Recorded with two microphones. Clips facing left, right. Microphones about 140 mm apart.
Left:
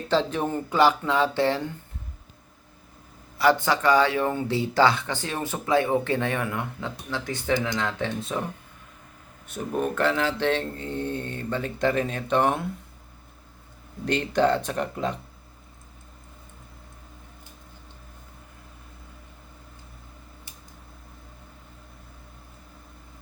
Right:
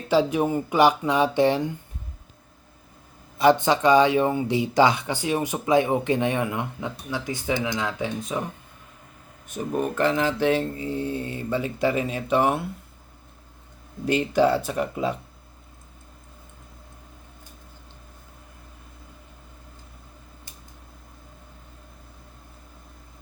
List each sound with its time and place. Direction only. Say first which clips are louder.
0.1 s speech: right 4 dB; 10° right (ahead or behind)
3.3 s speech: right 3 dB; 20° right (ahead or behind)
9.6 s speech: right 1 dB; 5° right (ahead or behind)
14.0 s speech: right 2 dB; 10° right (ahead or behind)